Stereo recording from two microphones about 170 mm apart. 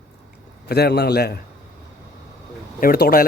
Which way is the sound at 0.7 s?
70° left (ahead or behind).